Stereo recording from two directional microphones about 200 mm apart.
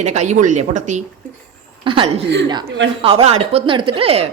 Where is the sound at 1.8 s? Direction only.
25° right (ahead or behind).